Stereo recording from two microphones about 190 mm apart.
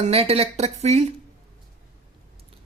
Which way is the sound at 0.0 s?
30° right (ahead or behind).